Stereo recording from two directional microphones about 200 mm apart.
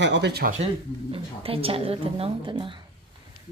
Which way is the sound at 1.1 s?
30° right (ahead or behind).